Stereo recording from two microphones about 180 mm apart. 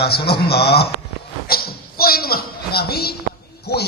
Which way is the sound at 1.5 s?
55° left (ahead or behind).